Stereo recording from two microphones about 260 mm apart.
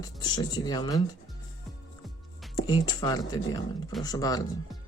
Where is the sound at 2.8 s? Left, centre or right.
Centre.